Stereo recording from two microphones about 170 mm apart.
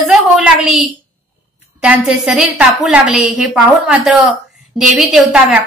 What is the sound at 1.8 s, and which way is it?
A woman's voice, 5° right (ahead or behind).